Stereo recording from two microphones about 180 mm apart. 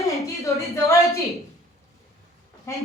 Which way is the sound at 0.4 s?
15° left (ahead or behind).